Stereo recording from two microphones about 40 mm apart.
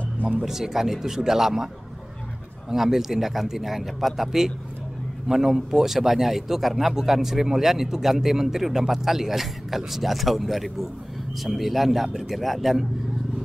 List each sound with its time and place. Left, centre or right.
0.4 s speech: centre
2.7 s a man's voice: centre